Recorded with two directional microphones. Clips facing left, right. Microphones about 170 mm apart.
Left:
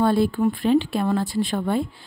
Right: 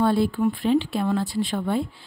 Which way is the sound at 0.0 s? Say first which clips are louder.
Left 1 dB; 45° left (ahead or behind).